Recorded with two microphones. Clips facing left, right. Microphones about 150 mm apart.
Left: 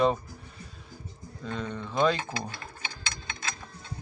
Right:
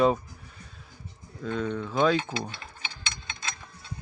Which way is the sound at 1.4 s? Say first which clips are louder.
Right 5 dB; centre (ahead or behind).